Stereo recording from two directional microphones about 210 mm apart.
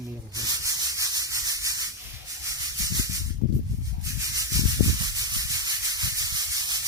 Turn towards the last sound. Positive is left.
turn(degrees=-20)  # may be behind; listen again after turning